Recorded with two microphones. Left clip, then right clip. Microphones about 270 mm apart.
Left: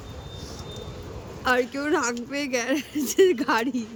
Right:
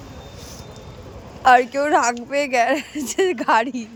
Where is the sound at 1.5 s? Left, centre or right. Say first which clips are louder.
Right 9 dB; centre.